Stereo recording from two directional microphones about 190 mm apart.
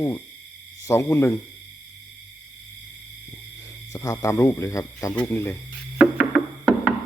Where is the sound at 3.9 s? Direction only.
15° left (ahead or behind).